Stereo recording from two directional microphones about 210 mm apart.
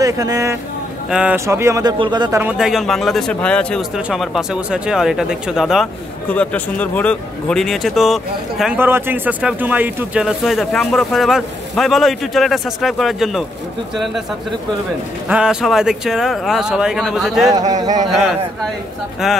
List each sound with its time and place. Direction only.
0.0 s speech: 15° right (ahead or behind)
2.4 s a man's voice: 5° right (ahead or behind)
15.2 s a man's voice: 5° right (ahead or behind)
17.5 s speech: 15° right (ahead or behind)
18.0 s a man's voice: centre (ahead or behind)